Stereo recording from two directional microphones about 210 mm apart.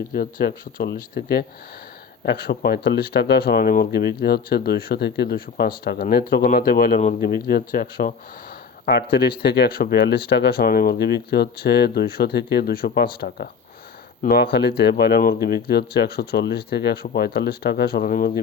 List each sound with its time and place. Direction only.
0.1 s speech: 45° left (ahead or behind)
8.9 s speech: 50° left (ahead or behind)
14.8 s speech: 50° left (ahead or behind)